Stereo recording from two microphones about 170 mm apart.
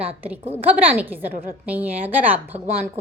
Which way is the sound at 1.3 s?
55° right (ahead or behind).